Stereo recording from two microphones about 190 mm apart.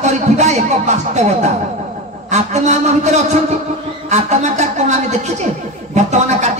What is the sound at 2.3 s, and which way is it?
Speech, 35° right (ahead or behind).